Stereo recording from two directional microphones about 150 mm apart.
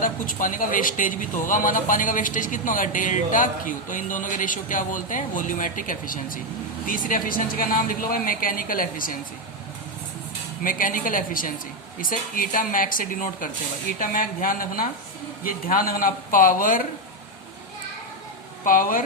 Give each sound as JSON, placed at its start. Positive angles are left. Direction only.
{"t": 0.0, "sound": "speech", "side_deg": 60}
{"t": 10.6, "sound": "speech", "side_deg": 65}
{"t": 18.6, "sound": "speech", "side_deg": 65}